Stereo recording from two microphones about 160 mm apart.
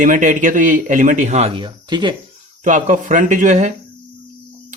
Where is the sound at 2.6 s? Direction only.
50° right (ahead or behind).